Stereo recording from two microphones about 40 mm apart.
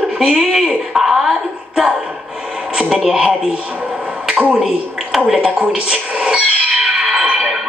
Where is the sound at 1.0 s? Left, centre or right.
Centre.